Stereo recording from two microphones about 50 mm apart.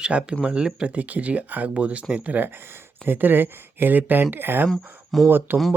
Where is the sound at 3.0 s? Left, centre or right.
Right.